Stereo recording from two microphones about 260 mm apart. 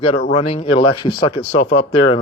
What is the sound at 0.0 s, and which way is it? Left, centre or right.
Speech, left.